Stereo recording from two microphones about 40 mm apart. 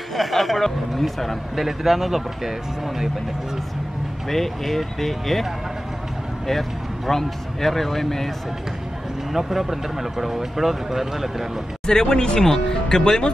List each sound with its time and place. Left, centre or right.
0.1 s speech: centre
4.3 s speech: centre
7.1 s a man's voice: centre
9.3 s speech: centre
11.8 s speech: centre